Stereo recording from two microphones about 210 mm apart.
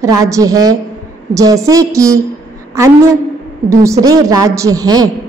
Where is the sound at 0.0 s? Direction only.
15° right (ahead or behind).